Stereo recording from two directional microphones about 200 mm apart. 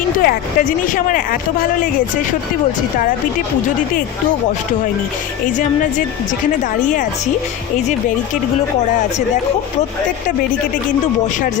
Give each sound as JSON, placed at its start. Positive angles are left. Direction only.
{"t": 0.2, "sound": "speech", "side_deg": 45}